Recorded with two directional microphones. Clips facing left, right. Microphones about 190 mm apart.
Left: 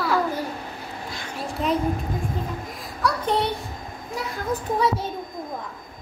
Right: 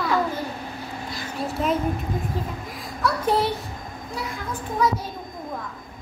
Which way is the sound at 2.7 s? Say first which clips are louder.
Right 1 dB; centre (ahead or behind).